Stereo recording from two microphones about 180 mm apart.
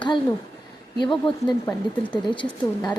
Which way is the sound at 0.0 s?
25° left (ahead or behind).